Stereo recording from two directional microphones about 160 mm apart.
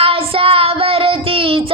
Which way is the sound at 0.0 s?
35° right (ahead or behind).